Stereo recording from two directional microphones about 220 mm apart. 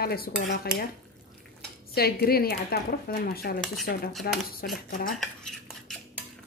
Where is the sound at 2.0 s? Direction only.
45° left (ahead or behind).